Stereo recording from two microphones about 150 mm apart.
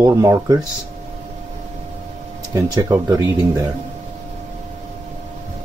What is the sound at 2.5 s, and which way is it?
Speech, 25° right (ahead or behind).